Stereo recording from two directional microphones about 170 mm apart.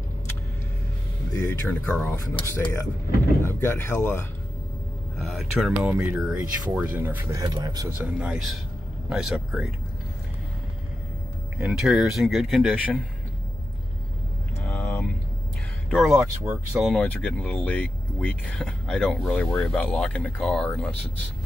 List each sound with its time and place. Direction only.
1.5 s speech: 10° left (ahead or behind)
5.2 s speech: centre (ahead or behind); by 7.9 s 25° right (ahead or behind)
8.0 s speech: 10° right (ahead or behind)
11.5 s speech: 5° right (ahead or behind)
14.6 s a sound: 10° left (ahead or behind)
15.9 s speech: centre (ahead or behind)
16.9 s speech: 10° left (ahead or behind)